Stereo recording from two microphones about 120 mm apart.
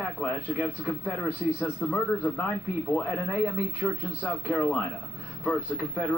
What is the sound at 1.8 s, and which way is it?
A man's voice, 15° left (ahead or behind).